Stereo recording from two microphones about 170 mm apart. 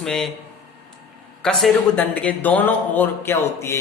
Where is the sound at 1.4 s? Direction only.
5° left (ahead or behind).